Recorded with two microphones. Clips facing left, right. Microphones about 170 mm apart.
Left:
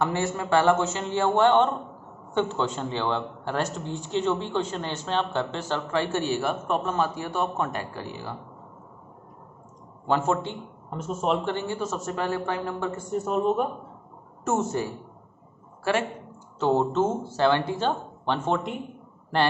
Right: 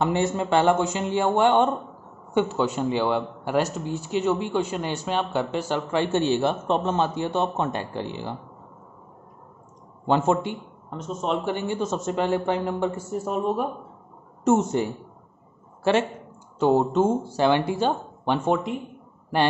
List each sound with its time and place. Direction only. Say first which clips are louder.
0.0 s a man's voice: right 3 dB; 20° right (ahead or behind)
10.0 s a man's voice: right 3 dB; 20° right (ahead or behind)
10.9 s speech: left 1 dB; 5° left (ahead or behind)
11.4 s speech: right 2 dB; 15° right (ahead or behind)
13.1 s speech: left 6 dB; centre (ahead or behind)
14.4 s a woman's voice: right 5 dB; 20° right (ahead or behind)
16.5 s a man's voice: right 3 dB; 15° right (ahead or behind)